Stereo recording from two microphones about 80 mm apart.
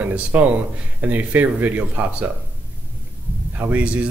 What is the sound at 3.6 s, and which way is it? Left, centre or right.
Speech, right.